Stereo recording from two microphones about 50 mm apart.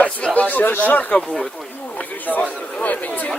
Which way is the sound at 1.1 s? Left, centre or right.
Centre.